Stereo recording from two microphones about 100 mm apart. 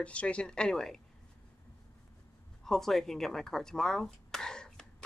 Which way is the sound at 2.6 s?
5° left (ahead or behind).